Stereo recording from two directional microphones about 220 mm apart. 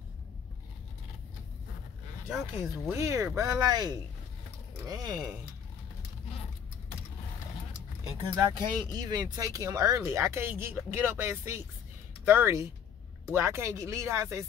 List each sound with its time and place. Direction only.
2.2 s speech: 5° right (ahead or behind)
8.7 s speech: 20° right (ahead or behind)